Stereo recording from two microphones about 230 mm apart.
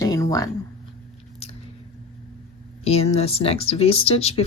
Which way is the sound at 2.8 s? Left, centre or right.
Left.